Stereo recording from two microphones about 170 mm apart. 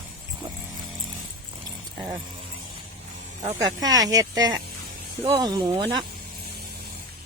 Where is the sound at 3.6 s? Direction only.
20° right (ahead or behind).